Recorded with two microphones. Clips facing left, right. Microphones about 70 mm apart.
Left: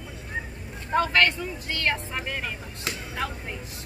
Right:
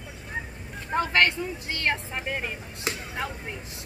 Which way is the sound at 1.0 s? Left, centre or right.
Centre.